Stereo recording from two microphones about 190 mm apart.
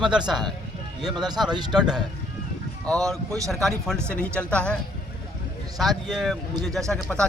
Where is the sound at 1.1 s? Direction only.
20° right (ahead or behind).